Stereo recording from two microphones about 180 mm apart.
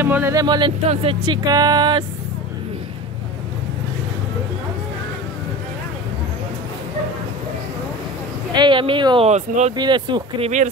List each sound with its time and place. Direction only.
0.0 s speech: 10° right (ahead or behind)
8.5 s speech: 25° right (ahead or behind)
9.8 s speech: 25° right (ahead or behind)